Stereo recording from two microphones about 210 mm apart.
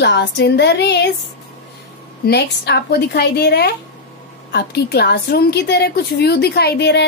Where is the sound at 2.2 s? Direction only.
50° left (ahead or behind).